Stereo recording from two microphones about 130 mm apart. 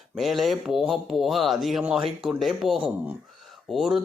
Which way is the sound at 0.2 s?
Centre (ahead or behind).